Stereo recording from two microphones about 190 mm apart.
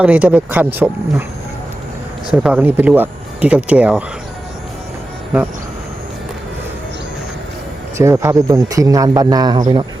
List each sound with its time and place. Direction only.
0.0 s a man's voice: 5° right (ahead or behind)
2.3 s a man's voice: 10° right (ahead or behind)
7.9 s a man's voice: 15° right (ahead or behind)